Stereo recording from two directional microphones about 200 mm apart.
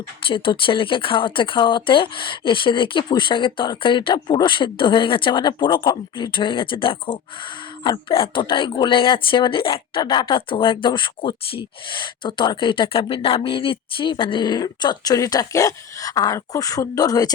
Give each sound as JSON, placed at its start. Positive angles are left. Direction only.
{"t": 0.2, "sound": "speech", "side_deg": 25}